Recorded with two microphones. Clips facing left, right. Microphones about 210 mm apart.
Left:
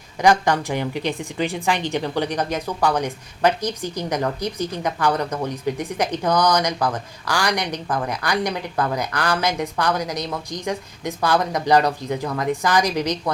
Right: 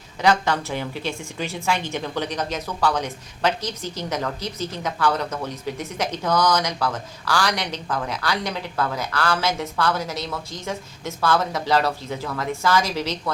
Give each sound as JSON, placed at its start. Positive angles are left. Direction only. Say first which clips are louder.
{"t": 0.2, "sound": "a woman's voice", "louder": "left 3 dB", "side_deg": 15}